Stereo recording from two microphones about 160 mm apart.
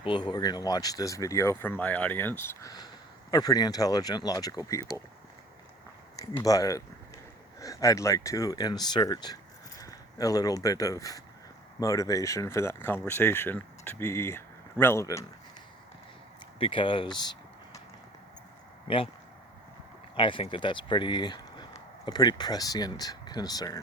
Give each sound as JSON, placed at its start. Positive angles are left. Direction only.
{"t": 0.0, "sound": "speech", "side_deg": 30}
{"t": 6.1, "sound": "speech", "side_deg": 20}
{"t": 16.6, "sound": "speech", "side_deg": 35}
{"t": 18.9, "sound": "speech", "side_deg": 35}
{"t": 20.1, "sound": "speech", "side_deg": 30}